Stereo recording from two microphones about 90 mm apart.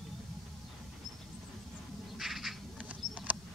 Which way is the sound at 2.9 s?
15° right (ahead or behind).